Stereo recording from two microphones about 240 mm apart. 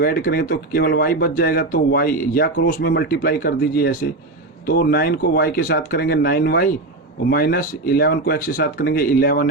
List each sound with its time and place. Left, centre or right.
0.0 s speech: left